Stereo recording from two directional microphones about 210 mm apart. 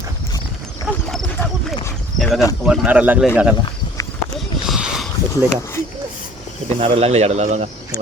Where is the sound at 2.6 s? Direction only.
5° right (ahead or behind).